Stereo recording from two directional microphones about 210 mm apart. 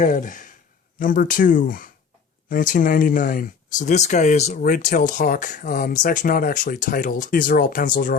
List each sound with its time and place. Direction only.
0.0 s speech: 40° left (ahead or behind)